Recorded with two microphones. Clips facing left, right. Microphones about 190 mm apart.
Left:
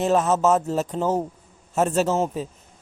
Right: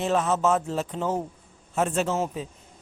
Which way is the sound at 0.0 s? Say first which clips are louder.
Left 4 dB; 40° left (ahead or behind).